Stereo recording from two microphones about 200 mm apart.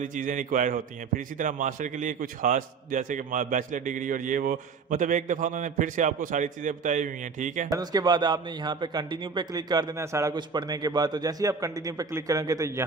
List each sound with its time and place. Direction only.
0.0 s a man's voice: 40° right (ahead or behind)
7.7 s a man's voice: 20° right (ahead or behind)